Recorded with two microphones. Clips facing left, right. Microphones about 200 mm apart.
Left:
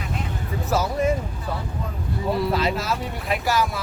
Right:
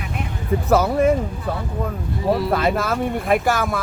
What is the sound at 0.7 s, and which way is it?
Speech, 55° right (ahead or behind).